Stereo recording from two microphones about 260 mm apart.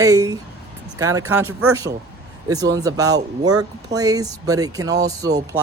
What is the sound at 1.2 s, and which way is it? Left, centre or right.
Speech, right.